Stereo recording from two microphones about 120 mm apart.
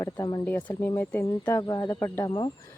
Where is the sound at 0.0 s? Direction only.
35° left (ahead or behind).